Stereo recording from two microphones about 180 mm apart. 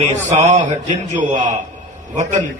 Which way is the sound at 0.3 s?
40° right (ahead or behind).